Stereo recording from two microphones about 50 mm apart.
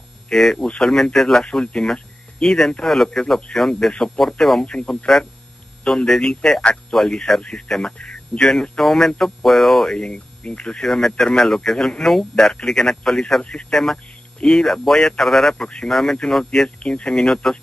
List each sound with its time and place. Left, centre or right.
0.3 s speech: centre
9.9 s speech: left
13.7 s speech: centre
15.6 s speech: centre
15.9 s speech: centre
16.8 s speech: left